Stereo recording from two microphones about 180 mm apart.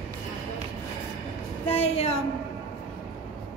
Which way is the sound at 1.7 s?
35° left (ahead or behind).